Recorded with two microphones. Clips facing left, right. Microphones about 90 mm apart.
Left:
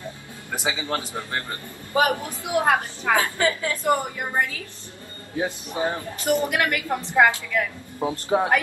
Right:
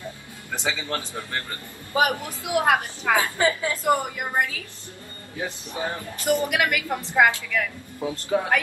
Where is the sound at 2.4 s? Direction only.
15° right (ahead or behind).